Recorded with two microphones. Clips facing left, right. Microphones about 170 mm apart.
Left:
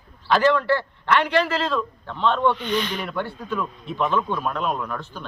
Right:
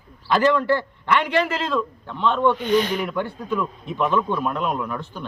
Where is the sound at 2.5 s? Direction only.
45° right (ahead or behind).